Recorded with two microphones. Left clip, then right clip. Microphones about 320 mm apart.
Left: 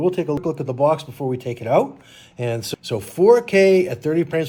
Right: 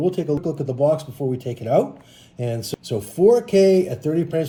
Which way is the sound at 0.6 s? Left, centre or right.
Centre.